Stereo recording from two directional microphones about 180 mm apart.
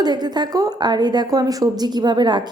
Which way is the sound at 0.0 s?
25° right (ahead or behind).